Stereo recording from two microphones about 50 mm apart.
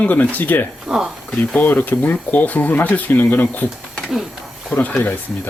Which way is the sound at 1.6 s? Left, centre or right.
Left.